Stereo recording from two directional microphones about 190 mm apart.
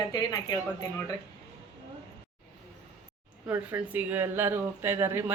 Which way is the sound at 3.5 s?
10° right (ahead or behind).